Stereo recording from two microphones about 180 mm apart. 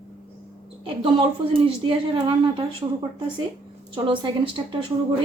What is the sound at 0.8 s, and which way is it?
A woman's voice, 30° right (ahead or behind).